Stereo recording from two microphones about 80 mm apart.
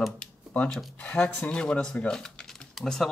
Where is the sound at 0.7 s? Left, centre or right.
Centre.